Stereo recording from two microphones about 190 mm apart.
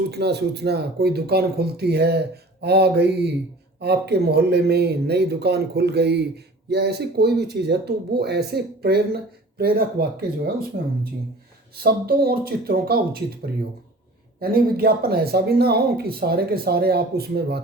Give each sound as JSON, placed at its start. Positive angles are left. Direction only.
{"t": 0.1, "sound": "speech", "side_deg": -60}